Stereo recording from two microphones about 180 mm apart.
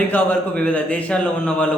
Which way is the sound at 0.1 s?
10° left (ahead or behind).